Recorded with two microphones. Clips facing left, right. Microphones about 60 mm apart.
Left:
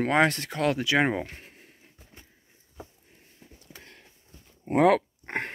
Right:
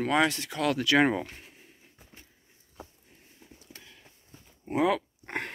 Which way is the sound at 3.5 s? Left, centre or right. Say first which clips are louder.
Left 3 dB; left.